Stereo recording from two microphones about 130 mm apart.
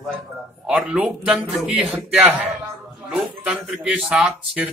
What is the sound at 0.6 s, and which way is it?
Speech, 5° right (ahead or behind).